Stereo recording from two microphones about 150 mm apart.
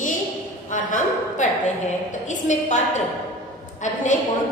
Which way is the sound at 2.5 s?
50° left (ahead or behind).